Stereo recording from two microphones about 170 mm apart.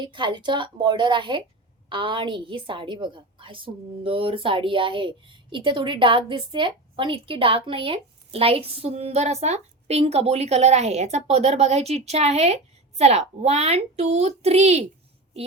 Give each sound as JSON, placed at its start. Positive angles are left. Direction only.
{"t": 0.0, "sound": "a woman's voice", "side_deg": -30}